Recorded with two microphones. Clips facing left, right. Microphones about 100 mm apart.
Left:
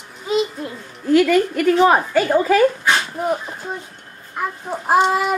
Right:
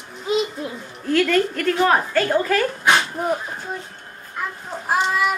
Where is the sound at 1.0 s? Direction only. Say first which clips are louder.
Left 4 dB; 5° left (ahead or behind).